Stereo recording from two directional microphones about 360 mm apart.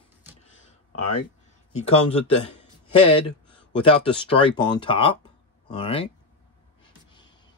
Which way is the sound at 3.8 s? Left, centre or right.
Centre.